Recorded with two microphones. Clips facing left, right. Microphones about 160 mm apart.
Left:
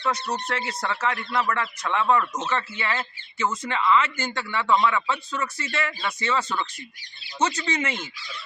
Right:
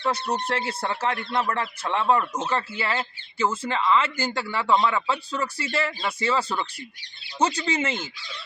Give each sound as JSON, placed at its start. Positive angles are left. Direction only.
{"t": 0.4, "sound": "speech", "side_deg": -30}